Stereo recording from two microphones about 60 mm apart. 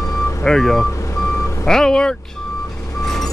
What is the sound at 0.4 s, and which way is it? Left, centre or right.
Speech, centre.